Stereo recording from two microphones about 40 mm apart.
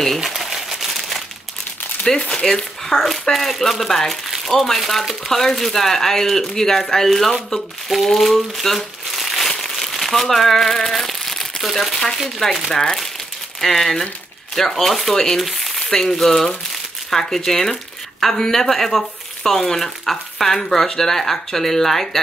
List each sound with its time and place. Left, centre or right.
0.2 s crumpling: centre
2.3 s speech: centre
8.5 s crumpling: centre
12.4 s speech: centre
15.1 s speech: centre
15.4 s a sound: centre
15.9 s speech: centre